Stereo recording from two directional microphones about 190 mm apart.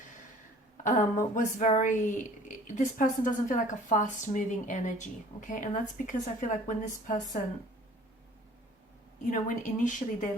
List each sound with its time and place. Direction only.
0.9 s a woman's voice: 40° left (ahead or behind)
9.3 s speech: 40° left (ahead or behind)